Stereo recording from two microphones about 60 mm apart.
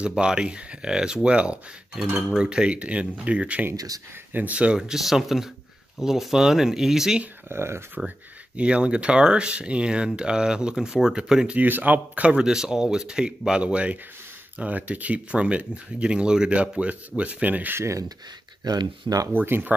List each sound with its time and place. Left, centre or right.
0.0 s speech: centre
3.7 s speech: right
4.3 s speech: right
4.7 s speech: centre
7.4 s speech: right
8.5 s speech: centre
11.5 s speech: right
12.4 s speech: centre; by 17.7 s right
17.7 s speech: right
18.6 s speech: right
19.3 s speech: right